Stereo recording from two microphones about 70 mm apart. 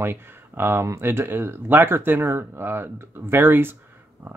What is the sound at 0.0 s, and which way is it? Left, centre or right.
Speech, right.